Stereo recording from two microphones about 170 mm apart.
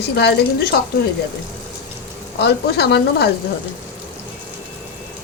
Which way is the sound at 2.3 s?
70° left (ahead or behind).